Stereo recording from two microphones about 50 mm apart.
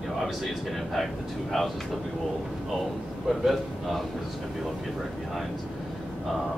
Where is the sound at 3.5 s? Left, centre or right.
Centre.